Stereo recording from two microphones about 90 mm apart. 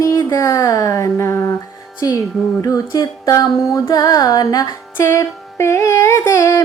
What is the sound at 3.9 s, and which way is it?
Music, 45° left (ahead or behind).